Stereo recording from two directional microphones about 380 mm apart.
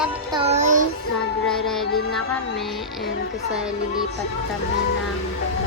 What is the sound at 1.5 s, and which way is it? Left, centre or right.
Music, centre.